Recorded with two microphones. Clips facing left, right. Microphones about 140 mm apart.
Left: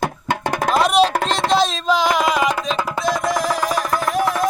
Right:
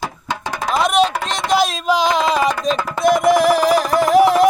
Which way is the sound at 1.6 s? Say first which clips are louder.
Right 1 dB; 10° right (ahead or behind).